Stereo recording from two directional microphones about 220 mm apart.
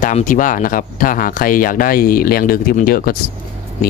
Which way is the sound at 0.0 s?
35° left (ahead or behind).